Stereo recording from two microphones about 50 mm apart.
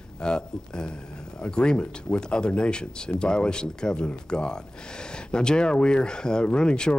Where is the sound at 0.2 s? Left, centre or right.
Centre.